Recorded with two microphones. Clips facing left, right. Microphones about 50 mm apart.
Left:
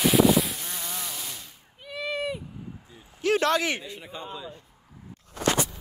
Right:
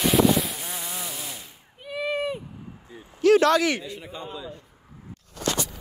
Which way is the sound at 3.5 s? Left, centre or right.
Left.